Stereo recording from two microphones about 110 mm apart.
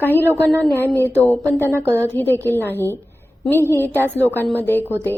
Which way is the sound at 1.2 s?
15° left (ahead or behind).